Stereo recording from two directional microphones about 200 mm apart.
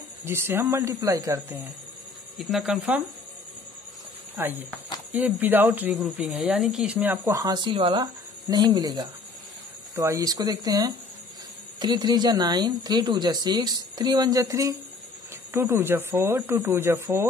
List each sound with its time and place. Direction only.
0.2 s speech: 10° right (ahead or behind)
2.3 s speech: centre (ahead or behind)
4.4 s speech: 10° right (ahead or behind)